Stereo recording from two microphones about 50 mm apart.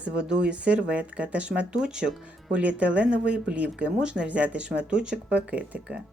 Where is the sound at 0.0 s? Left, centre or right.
Centre.